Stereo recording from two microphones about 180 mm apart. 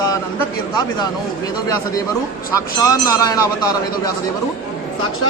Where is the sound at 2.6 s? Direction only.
20° left (ahead or behind).